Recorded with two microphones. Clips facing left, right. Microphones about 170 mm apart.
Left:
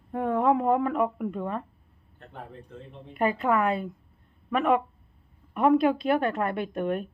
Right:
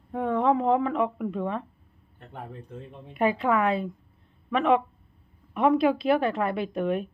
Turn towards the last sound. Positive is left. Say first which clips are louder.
# right 1 dB
turn(degrees=-5)  # may be behind; listen again after turning